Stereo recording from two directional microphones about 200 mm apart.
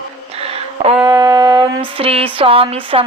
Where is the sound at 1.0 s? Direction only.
15° right (ahead or behind).